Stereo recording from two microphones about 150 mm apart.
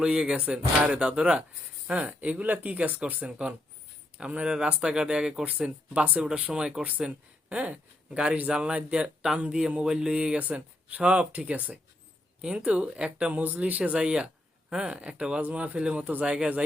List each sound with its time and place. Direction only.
0.0 s speech: 5° right (ahead or behind)